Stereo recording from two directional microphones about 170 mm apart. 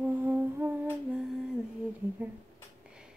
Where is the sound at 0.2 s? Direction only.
10° right (ahead or behind).